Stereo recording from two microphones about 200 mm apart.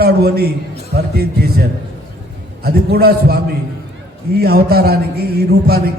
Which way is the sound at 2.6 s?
50° right (ahead or behind).